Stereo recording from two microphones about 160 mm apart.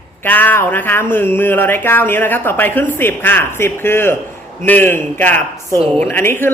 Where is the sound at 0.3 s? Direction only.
10° left (ahead or behind).